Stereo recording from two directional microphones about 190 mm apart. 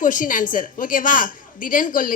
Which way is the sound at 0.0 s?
45° left (ahead or behind).